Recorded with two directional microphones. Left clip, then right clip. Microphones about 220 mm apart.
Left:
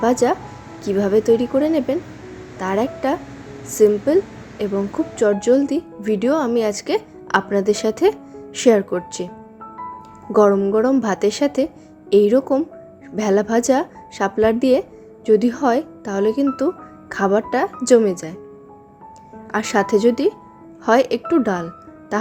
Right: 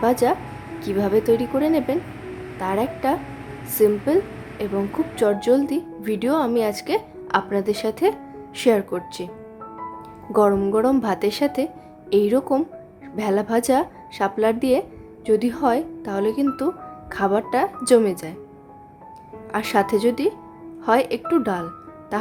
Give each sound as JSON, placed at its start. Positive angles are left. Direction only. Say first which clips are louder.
{"t": 0.0, "sound": "a woman's voice", "louder": "left 2 dB", "side_deg": 10}
{"t": 10.3, "sound": "a woman's voice", "louder": "left 3 dB", "side_deg": 10}
{"t": 19.5, "sound": "a woman's voice", "louder": "left 2 dB", "side_deg": 10}